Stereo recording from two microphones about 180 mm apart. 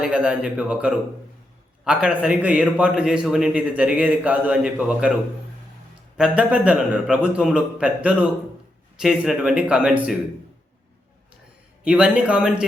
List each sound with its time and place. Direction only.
0.0 s a man's voice: 5° right (ahead or behind)
6.1 s a man's voice: 5° right (ahead or behind)
11.9 s speech: 5° right (ahead or behind)